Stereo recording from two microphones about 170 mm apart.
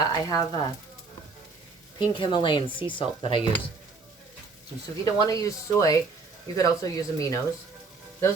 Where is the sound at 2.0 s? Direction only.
30° left (ahead or behind).